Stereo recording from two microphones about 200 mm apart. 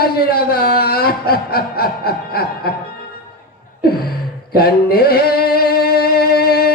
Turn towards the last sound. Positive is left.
turn(degrees=50)  # may be behind; listen again after turning